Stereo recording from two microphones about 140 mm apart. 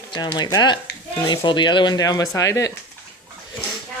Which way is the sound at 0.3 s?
30° left (ahead or behind).